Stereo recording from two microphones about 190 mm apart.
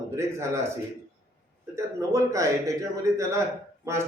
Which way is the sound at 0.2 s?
15° right (ahead or behind).